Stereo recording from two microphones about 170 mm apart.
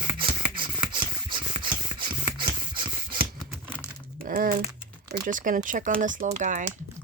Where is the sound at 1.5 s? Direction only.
30° right (ahead or behind).